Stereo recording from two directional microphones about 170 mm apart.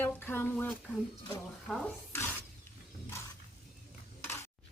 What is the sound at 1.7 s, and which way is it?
Speech, centre (ahead or behind).